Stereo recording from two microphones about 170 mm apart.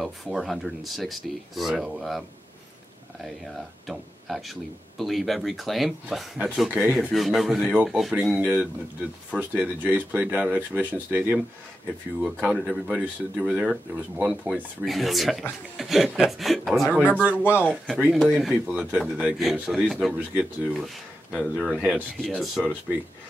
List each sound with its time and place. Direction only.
0.0 s speech: centre (ahead or behind)
3.8 s speech: centre (ahead or behind)
17.5 s speech: 10° right (ahead or behind)